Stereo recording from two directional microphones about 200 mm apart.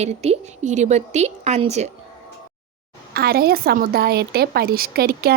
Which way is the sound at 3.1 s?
50° right (ahead or behind).